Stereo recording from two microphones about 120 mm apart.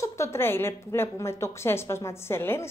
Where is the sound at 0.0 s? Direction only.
20° left (ahead or behind).